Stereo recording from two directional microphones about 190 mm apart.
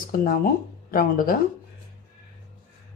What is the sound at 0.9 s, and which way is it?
Speech, 50° left (ahead or behind).